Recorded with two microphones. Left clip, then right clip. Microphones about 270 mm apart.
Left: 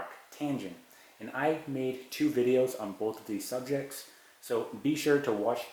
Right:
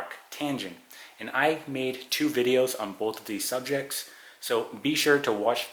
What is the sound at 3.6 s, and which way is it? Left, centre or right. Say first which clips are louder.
Speech: right 4 dB; centre.